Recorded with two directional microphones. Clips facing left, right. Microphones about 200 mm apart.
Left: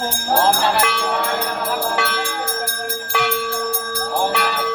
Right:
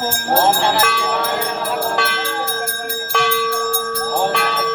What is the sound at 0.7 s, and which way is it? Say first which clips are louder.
Speech: right 1 dB; 5° right (ahead or behind).